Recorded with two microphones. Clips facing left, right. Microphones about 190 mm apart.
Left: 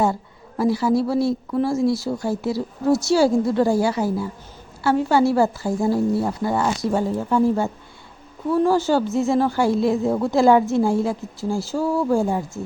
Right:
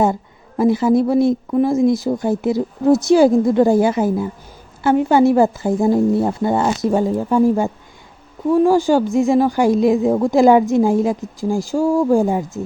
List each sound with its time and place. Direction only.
0.0 s a woman's voice: 20° right (ahead or behind)